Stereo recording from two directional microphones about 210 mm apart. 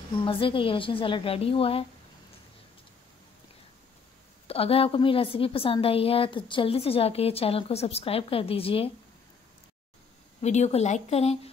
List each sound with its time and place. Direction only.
0.2 s a woman's voice: 25° left (ahead or behind)
4.5 s a woman's voice: 25° left (ahead or behind)
10.4 s speech: 30° left (ahead or behind)